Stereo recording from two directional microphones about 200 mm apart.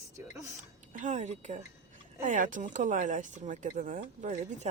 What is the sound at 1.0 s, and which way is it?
Speech, 35° right (ahead or behind).